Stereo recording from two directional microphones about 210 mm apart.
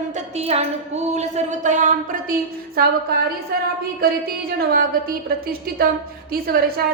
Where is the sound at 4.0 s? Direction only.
45° right (ahead or behind).